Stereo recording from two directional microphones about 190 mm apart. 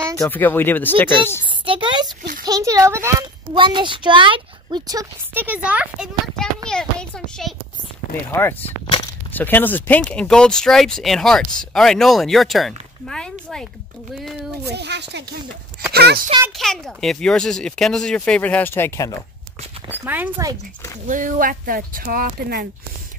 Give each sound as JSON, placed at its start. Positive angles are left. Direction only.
{"t": 0.2, "sound": "speech", "side_deg": 10}
{"t": 1.5, "sound": "a child's voice", "side_deg": -25}
{"t": 3.5, "sound": "a child's voice", "side_deg": -25}
{"t": 14.7, "sound": "speech", "side_deg": -60}
{"t": 16.5, "sound": "speech", "side_deg": 0}
{"t": 20.4, "sound": "speech", "side_deg": -20}
{"t": 21.1, "sound": "speech", "side_deg": -45}